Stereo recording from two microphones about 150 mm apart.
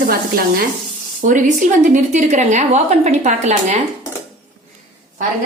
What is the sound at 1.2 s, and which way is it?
A woman's voice, 60° right (ahead or behind).